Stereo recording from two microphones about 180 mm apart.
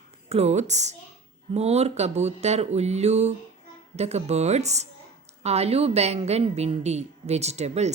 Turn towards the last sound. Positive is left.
turn(degrees=-40)  # may be behind; listen again after turning